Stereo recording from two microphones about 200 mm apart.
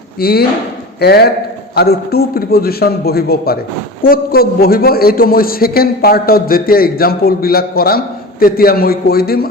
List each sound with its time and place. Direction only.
0.2 s a man's voice: 50° left (ahead or behind)